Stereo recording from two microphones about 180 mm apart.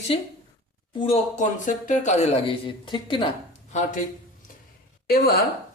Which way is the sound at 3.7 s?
45° left (ahead or behind).